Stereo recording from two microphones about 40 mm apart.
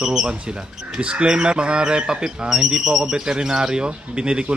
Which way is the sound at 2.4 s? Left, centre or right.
Centre.